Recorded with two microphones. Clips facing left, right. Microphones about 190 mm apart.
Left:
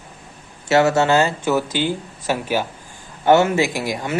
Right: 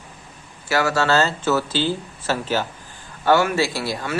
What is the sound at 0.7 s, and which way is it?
Speech, 25° left (ahead or behind).